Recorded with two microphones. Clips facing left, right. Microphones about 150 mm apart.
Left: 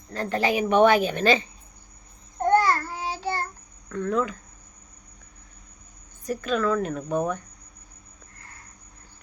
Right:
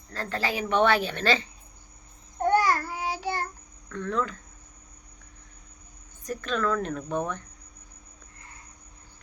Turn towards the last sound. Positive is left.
turn(degrees=10)  # may be behind; listen again after turning